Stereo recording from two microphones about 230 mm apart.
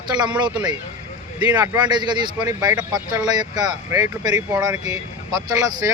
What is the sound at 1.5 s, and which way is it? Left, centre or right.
Speech, centre.